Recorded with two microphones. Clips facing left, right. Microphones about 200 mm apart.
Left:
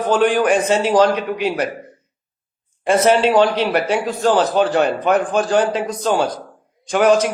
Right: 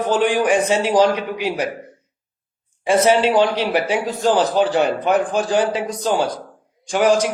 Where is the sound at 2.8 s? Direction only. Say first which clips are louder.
Left 1 dB; 15° right (ahead or behind).